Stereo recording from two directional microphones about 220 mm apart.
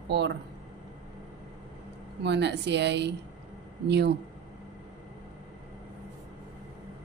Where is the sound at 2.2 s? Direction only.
50° right (ahead or behind).